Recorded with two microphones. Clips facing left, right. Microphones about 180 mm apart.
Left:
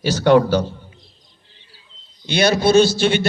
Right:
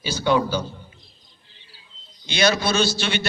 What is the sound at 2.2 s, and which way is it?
A man's voice, 60° left (ahead or behind).